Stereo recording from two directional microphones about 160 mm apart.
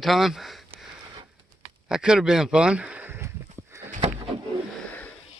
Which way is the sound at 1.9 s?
5° right (ahead or behind).